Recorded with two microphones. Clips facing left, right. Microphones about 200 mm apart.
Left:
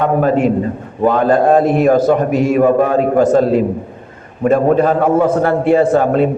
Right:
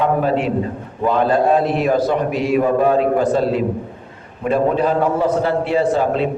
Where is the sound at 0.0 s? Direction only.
50° left (ahead or behind).